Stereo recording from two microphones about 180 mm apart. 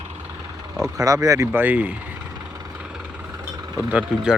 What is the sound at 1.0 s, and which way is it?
Speech, 20° right (ahead or behind).